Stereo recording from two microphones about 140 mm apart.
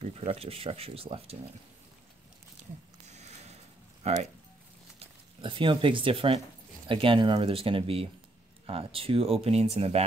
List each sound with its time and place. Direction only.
0.0 s speech: 45° right (ahead or behind)
3.1 s a sound: 55° right (ahead or behind)
4.0 s speech: 50° right (ahead or behind)
4.9 s speech: 40° right (ahead or behind)